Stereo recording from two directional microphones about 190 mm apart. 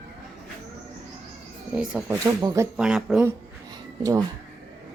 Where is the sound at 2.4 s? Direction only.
15° right (ahead or behind).